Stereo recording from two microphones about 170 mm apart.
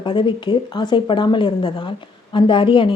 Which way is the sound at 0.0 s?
30° left (ahead or behind).